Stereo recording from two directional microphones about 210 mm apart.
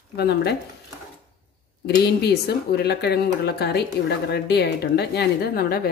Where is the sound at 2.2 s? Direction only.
50° left (ahead or behind).